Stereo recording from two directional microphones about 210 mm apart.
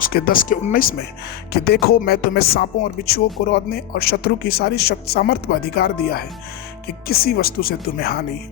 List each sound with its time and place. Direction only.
0.0 s speech: 45° left (ahead or behind)